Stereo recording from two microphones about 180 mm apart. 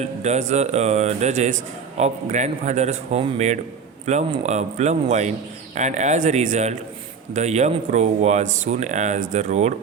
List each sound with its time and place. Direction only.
0.0 s speech: 40° right (ahead or behind)